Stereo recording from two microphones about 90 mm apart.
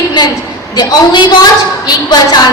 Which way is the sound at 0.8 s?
50° left (ahead or behind).